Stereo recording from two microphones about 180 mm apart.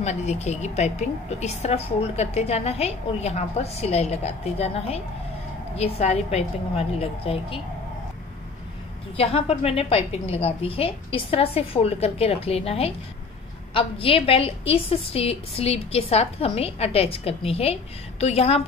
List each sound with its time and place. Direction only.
0.0 s a woman's voice: 40° left (ahead or behind)
9.1 s a woman's voice: 35° left (ahead or behind)